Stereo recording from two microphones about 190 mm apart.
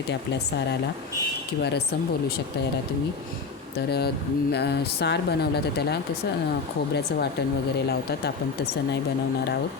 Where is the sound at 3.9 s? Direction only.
60° left (ahead or behind).